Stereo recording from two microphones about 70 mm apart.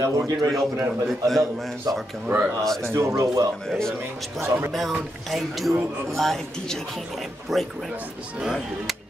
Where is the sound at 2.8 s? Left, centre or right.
Right.